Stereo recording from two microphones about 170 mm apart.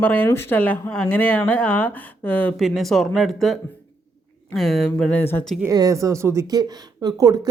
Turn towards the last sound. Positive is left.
turn(degrees=-25)  # may be behind; listen again after turning